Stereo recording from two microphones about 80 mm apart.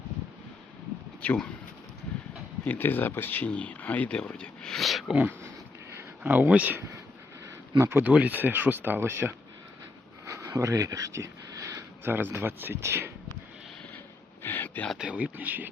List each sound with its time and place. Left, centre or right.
1.2 s speech: centre
2.6 s speech: left; by 5.1 s centre
5.1 s speech: centre
7.8 s speech: right
8.1 s speech: centre
10.2 s a sound: right
12.0 s speech: right
14.4 s a sound: left
14.9 s speech: centre